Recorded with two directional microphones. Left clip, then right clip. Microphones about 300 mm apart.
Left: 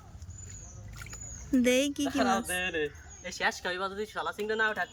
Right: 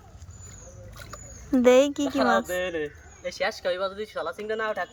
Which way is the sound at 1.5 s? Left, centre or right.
Right.